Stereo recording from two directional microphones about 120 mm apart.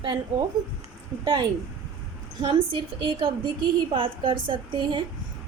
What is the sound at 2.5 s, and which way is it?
Speech, 45° right (ahead or behind).